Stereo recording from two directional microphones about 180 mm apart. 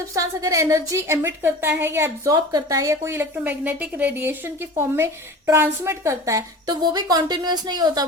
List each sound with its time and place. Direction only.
0.1 s a woman's voice: 20° right (ahead or behind)